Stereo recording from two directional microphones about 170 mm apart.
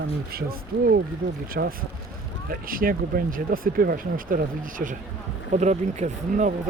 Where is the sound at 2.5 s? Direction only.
55° right (ahead or behind).